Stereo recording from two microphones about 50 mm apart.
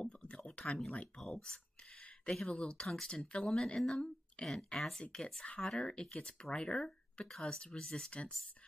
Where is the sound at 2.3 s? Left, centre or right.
Centre.